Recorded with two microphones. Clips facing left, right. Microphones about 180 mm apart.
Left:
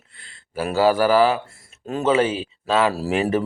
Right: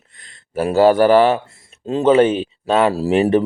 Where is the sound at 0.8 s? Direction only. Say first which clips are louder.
Right 5 dB; 45° right (ahead or behind).